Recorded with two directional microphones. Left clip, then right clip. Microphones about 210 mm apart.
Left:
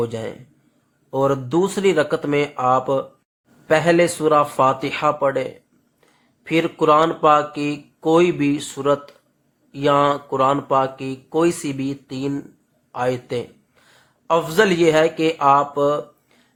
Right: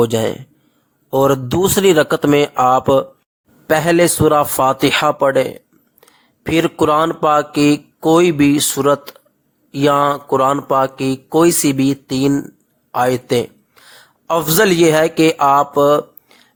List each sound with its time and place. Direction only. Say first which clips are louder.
0.0 s a man's voice: right 9 dB; 50° right (ahead or behind)